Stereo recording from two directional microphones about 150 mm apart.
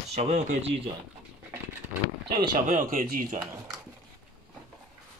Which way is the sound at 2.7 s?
65° right (ahead or behind).